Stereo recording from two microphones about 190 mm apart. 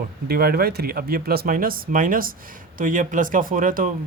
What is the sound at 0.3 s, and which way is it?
Speech, 55° right (ahead or behind).